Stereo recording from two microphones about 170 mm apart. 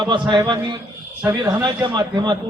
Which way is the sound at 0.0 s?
30° right (ahead or behind).